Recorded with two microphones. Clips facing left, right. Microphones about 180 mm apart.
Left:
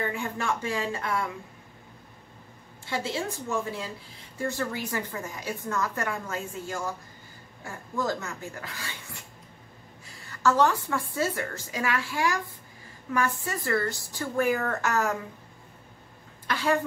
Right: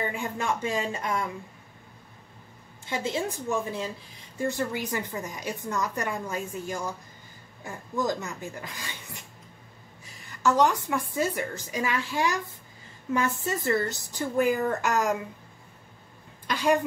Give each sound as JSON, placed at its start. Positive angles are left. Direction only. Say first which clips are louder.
{"t": 0.0, "sound": "a woman's voice", "louder": "even", "side_deg": -15}
{"t": 2.9, "sound": "a woman's voice", "louder": "right 1 dB", "side_deg": -20}
{"t": 16.4, "sound": "a sound", "louder": "right 2 dB", "side_deg": -15}